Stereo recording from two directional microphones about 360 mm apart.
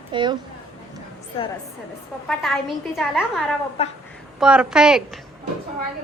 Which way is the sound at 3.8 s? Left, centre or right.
Centre.